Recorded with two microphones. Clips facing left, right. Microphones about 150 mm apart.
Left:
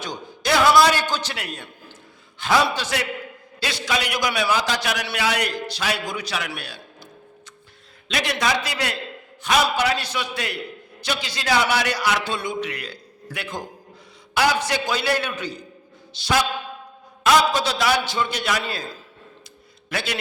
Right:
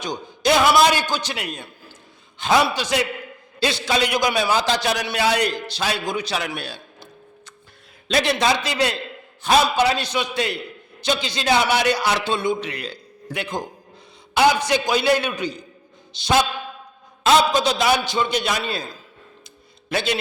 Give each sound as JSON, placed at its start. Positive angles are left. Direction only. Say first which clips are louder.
{"t": 0.0, "sound": "a man's voice", "louder": "right 5 dB", "side_deg": -20}
{"t": 19.9, "sound": "a man's voice", "louder": "right 5 dB", "side_deg": -25}